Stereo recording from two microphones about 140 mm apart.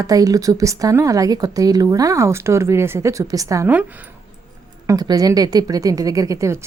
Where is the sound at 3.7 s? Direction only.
10° right (ahead or behind).